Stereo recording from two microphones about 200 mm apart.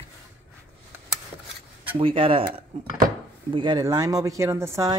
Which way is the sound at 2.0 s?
25° right (ahead or behind).